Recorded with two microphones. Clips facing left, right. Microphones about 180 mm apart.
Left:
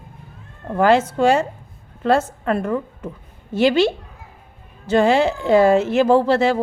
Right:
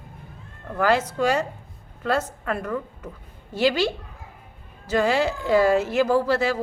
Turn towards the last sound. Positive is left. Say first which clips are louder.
# left 6 dB
turn(degrees=25)  # may be behind; listen again after turning